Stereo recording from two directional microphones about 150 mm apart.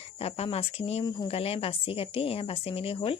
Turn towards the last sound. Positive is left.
turn(degrees=40)  # may be behind; listen again after turning